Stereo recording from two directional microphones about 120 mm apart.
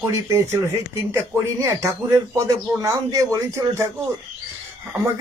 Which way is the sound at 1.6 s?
25° right (ahead or behind).